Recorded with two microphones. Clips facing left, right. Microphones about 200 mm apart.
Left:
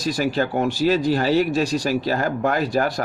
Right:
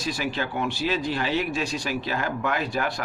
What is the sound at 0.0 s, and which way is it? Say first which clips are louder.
Speech: left 7 dB; 40° left (ahead or behind).